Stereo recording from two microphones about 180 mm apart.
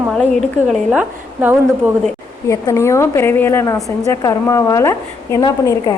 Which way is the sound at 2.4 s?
15° left (ahead or behind).